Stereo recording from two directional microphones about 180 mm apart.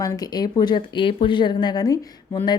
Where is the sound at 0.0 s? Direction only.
20° left (ahead or behind).